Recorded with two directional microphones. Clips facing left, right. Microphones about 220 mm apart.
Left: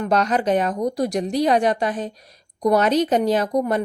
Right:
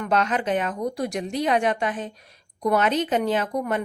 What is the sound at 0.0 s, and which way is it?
A woman's voice, 40° left (ahead or behind).